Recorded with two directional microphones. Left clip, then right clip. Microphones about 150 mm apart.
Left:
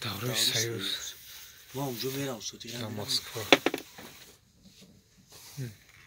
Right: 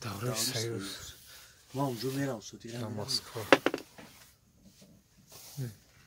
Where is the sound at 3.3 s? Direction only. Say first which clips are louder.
Left 1 dB; 25° left (ahead or behind).